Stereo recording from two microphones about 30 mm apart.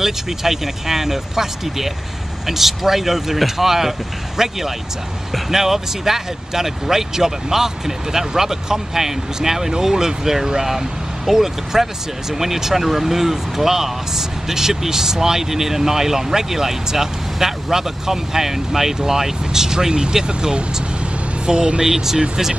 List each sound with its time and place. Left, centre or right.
0.0 s speech: centre
19.9 s speech: right
21.8 s speech: centre